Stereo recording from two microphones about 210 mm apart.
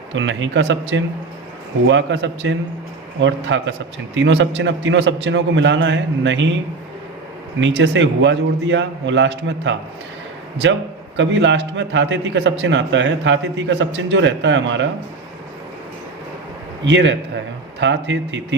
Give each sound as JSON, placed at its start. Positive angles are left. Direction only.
{"t": 0.1, "sound": "a man's voice", "side_deg": -60}
{"t": 7.8, "sound": "a man's voice", "side_deg": -60}
{"t": 16.8, "sound": "a man's voice", "side_deg": -60}